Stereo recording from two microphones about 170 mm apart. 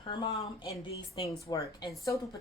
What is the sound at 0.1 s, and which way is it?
A woman's voice, 25° left (ahead or behind).